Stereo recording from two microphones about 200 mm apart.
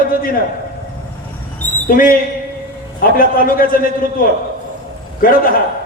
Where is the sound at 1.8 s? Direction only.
45° left (ahead or behind).